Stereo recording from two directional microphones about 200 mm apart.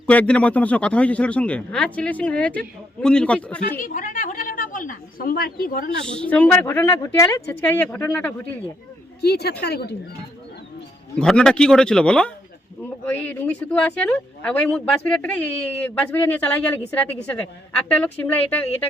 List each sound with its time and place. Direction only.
0.1 s speech: 5° left (ahead or behind)
3.8 s a woman's voice: 40° left (ahead or behind)
6.1 s speech: 5° left (ahead or behind)
9.2 s speech: 55° left (ahead or behind)
11.2 s speech: 5° left (ahead or behind)